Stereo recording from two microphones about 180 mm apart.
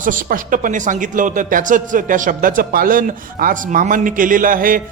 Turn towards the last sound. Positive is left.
turn(degrees=-50)  # may be behind; listen again after turning